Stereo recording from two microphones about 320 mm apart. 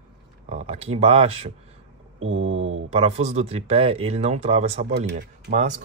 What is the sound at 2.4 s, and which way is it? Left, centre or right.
Speech, right.